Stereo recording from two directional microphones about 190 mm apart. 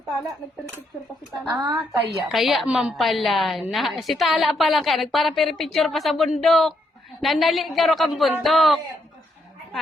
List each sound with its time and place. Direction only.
1.5 s a woman's voice: 20° right (ahead or behind)
2.1 s a woman's voice: centre (ahead or behind)